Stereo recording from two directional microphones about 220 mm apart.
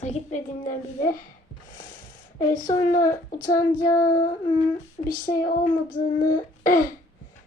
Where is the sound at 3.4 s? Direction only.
15° left (ahead or behind).